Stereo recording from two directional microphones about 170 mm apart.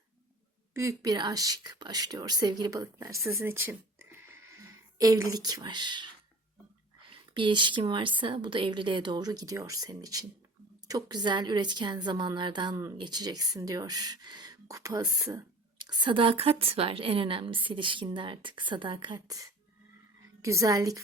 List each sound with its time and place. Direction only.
0.7 s speech: 15° right (ahead or behind)
7.1 s speech: 30° right (ahead or behind)